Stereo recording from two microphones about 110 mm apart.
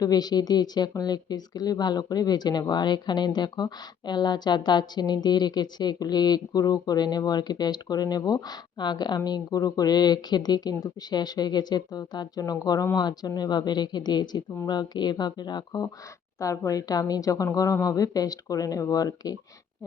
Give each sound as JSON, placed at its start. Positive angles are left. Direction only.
{"t": 0.0, "sound": "a woman's voice", "side_deg": 35}